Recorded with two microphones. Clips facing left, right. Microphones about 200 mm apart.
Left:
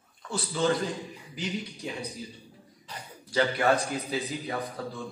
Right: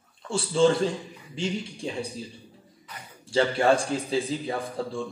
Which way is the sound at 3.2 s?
25° right (ahead or behind).